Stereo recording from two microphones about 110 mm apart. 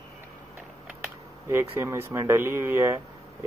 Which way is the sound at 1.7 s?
20° right (ahead or behind).